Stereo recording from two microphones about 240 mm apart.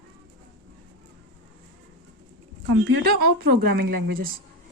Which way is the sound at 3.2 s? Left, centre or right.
Right.